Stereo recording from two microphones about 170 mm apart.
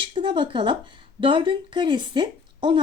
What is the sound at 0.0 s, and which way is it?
A woman's voice, 30° right (ahead or behind).